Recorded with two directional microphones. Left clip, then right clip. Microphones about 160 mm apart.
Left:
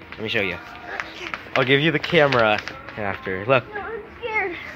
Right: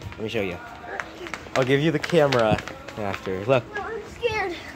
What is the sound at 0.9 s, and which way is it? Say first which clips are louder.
Run: left 3 dB; 35° right (ahead or behind).